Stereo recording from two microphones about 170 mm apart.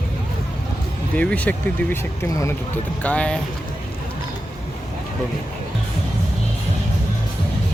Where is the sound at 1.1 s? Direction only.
10° left (ahead or behind).